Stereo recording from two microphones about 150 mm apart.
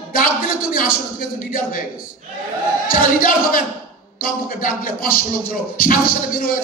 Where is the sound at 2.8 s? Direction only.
70° left (ahead or behind).